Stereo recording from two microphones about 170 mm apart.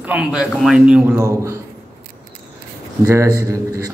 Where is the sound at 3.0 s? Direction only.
20° right (ahead or behind).